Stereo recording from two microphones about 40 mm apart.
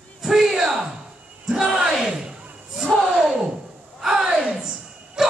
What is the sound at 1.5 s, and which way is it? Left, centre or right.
Battle cry, centre.